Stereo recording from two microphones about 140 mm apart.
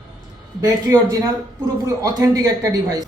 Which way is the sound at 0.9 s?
15° right (ahead or behind).